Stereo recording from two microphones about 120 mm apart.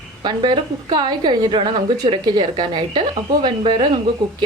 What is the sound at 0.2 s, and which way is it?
A woman's voice, 40° right (ahead or behind).